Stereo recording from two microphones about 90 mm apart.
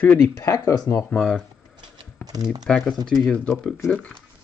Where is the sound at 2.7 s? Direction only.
10° left (ahead or behind).